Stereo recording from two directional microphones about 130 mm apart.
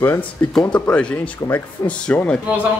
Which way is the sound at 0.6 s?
10° left (ahead or behind).